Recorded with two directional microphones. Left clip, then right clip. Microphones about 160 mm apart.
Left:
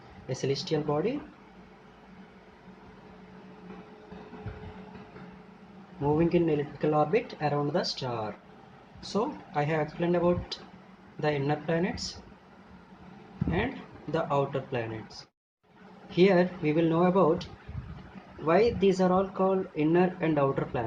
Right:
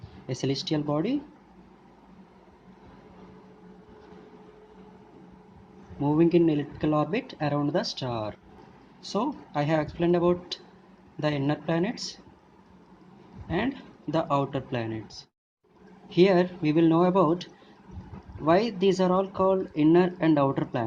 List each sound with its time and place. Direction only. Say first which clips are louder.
0.3 s speech: right 1 dB; 60° right (ahead or behind)
6.1 s speech: right 5 dB; 60° right (ahead or behind)
14.1 s speech: right 2 dB; 60° right (ahead or behind)
16.0 s speech: right 2 dB; 65° right (ahead or behind)